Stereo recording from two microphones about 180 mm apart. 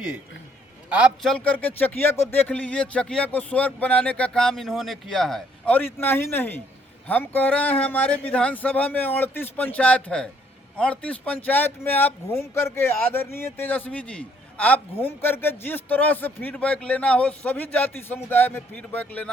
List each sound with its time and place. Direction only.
0.9 s speech: 5° right (ahead or behind); by 19.3 s 10° left (ahead or behind)